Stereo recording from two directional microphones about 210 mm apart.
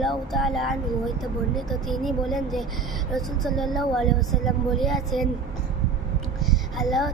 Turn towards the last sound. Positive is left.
turn(degrees=0)  # may be behind; listen again after turning